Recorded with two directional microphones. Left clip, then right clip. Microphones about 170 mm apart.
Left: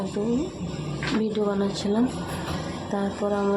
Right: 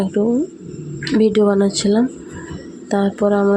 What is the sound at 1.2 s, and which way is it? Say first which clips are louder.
Speech: right 13 dB; 40° right (ahead or behind).